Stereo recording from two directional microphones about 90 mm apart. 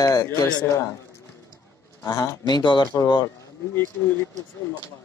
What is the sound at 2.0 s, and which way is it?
Speech, 45° left (ahead or behind).